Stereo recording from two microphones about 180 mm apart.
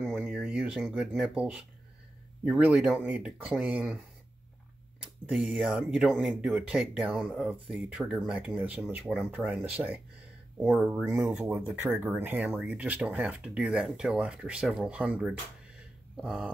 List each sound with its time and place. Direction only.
0.1 s speech: 5° right (ahead or behind)
5.0 s speech: 5° right (ahead or behind)